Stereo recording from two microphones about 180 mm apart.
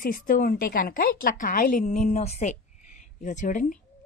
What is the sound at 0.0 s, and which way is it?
A woman's voice, 50° left (ahead or behind).